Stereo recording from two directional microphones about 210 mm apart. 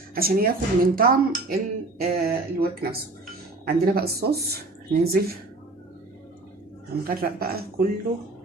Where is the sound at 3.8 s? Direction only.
45° right (ahead or behind).